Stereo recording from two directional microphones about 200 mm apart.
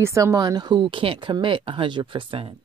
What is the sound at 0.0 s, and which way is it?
Speech, 15° right (ahead or behind).